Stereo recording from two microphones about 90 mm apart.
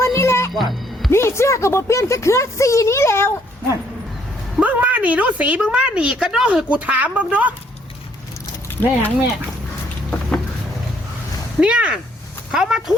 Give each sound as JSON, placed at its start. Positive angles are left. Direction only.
{"t": 0.0, "sound": "music", "side_deg": 30}
{"t": 0.6, "sound": "speech", "side_deg": 0}
{"t": 1.1, "sound": "speech", "side_deg": 30}
{"t": 4.6, "sound": "a woman's voice", "side_deg": -15}
{"t": 8.8, "sound": "speech", "side_deg": 20}
{"t": 10.1, "sound": "vehicle", "side_deg": 5}
{"t": 11.6, "sound": "a woman's voice", "side_deg": -15}